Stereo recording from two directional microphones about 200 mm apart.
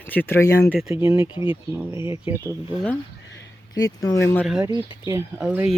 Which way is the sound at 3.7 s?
20° left (ahead or behind).